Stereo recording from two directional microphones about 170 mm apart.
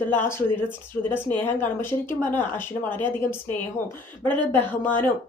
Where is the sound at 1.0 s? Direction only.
10° left (ahead or behind).